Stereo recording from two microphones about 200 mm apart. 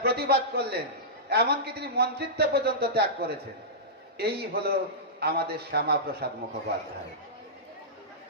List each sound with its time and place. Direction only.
0.0 s a man's voice: 50° right (ahead or behind)